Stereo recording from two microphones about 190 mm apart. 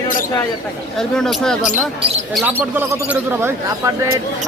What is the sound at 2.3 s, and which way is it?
Speech, 5° right (ahead or behind).